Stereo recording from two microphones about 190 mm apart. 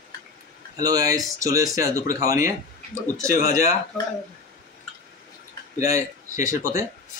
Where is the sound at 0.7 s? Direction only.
20° right (ahead or behind).